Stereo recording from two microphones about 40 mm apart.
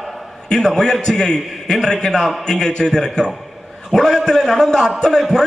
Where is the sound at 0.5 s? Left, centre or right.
Centre.